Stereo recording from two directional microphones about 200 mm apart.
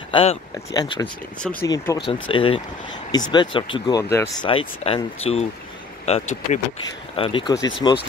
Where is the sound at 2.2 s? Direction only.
25° left (ahead or behind).